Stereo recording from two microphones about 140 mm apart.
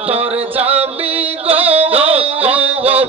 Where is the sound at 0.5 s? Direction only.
10° right (ahead or behind).